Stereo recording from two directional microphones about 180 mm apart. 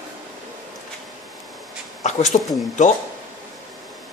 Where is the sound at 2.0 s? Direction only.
40° left (ahead or behind).